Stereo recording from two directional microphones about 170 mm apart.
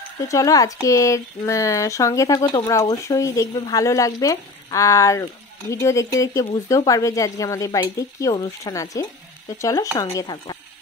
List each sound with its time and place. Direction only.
0.3 s speech: 20° left (ahead or behind)